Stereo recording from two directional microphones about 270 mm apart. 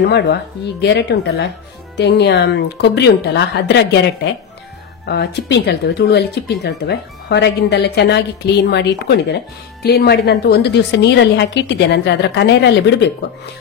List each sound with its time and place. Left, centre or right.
0.0 s a woman's voice: left